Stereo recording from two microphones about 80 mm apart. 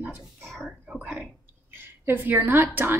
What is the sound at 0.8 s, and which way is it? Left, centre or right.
Speech, centre.